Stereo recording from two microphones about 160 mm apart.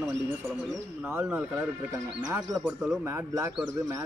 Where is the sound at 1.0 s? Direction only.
15° right (ahead or behind).